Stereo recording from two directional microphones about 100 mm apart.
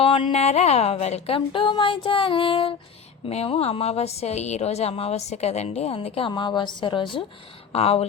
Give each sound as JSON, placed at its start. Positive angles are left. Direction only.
{"t": 0.0, "sound": "a woman's voice", "side_deg": 65}
{"t": 1.8, "sound": "music", "side_deg": 60}
{"t": 3.2, "sound": "a woman's voice", "side_deg": 80}
{"t": 7.7, "sound": "speech", "side_deg": 80}